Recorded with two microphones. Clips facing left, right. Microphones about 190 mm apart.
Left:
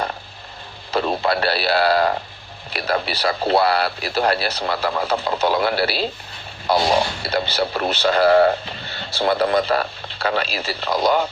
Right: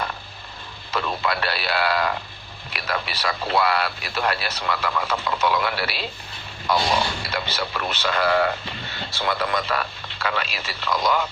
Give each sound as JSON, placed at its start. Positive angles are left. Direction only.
{"t": 0.9, "sound": "a man's voice", "side_deg": 35}
{"t": 7.3, "sound": "a man's voice", "side_deg": 35}